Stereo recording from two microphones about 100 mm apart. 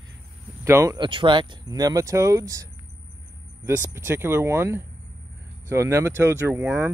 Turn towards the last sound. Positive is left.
turn(degrees=-20)  # may be behind; listen again after turning